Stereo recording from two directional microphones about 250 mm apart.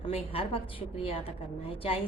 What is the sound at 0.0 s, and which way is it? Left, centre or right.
A woman's voice, left.